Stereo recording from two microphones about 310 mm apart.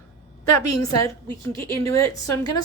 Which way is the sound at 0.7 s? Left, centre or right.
Centre.